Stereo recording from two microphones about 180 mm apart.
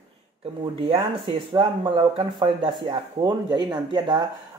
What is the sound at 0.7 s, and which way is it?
Speech, 30° right (ahead or behind).